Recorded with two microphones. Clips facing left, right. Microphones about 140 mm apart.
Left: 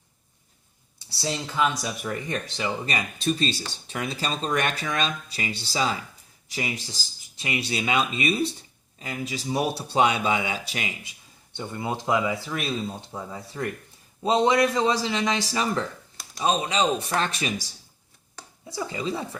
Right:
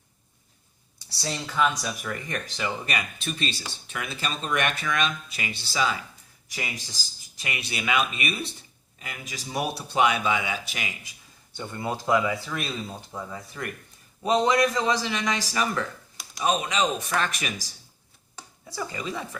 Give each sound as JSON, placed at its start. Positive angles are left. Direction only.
{"t": 1.2, "sound": "speech", "side_deg": 25}
{"t": 11.5, "sound": "speech", "side_deg": 20}
{"t": 18.7, "sound": "speech", "side_deg": 25}